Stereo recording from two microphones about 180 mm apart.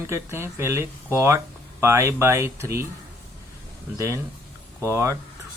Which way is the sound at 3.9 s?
15° right (ahead or behind).